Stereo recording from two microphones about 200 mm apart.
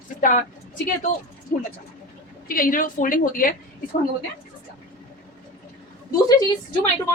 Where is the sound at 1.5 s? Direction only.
45° left (ahead or behind).